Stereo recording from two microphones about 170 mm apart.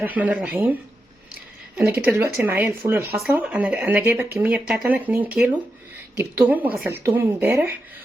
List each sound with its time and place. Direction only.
0.0 s speech: 10° right (ahead or behind)